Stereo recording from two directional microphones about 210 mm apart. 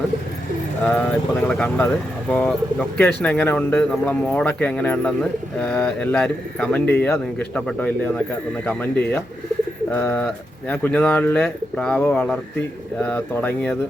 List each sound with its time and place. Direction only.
0.8 s speech: 10° left (ahead or behind)
9.9 s speech: 5° left (ahead or behind)